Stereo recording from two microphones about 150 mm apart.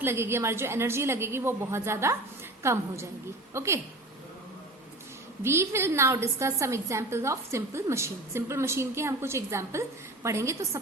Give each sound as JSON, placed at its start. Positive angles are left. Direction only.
{"t": 0.0, "sound": "a woman's voice", "side_deg": -15}
{"t": 5.4, "sound": "a woman's voice", "side_deg": -15}